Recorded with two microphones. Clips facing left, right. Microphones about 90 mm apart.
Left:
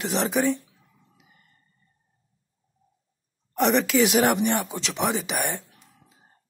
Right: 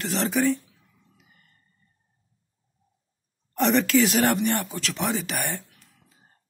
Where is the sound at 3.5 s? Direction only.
10° left (ahead or behind).